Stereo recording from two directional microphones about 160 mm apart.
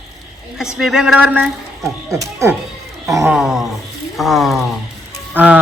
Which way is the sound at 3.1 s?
20° right (ahead or behind).